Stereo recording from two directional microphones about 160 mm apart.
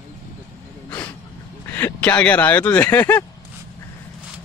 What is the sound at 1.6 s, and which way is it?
Speech, 15° left (ahead or behind).